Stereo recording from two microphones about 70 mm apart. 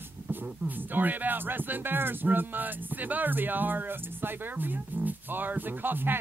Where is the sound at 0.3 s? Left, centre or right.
Right.